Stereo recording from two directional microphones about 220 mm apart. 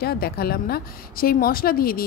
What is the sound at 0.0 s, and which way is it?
A woman's voice, 45° left (ahead or behind).